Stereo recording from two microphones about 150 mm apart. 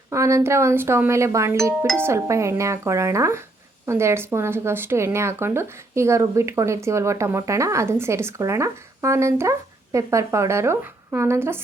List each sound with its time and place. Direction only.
0.1 s speech: 20° right (ahead or behind)